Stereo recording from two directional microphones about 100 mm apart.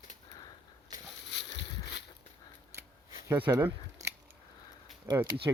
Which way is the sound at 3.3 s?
20° right (ahead or behind).